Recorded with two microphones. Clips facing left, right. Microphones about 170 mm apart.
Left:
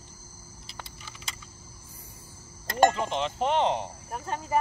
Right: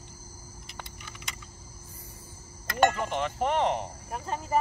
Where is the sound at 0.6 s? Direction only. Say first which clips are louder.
Even; 30° left (ahead or behind).